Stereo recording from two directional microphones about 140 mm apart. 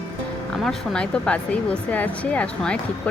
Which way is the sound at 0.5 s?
Centre (ahead or behind).